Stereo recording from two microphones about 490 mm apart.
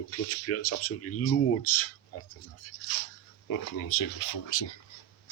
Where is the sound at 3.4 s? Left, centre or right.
Left.